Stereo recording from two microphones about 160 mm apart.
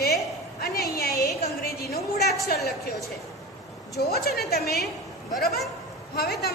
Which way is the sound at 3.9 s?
80° left.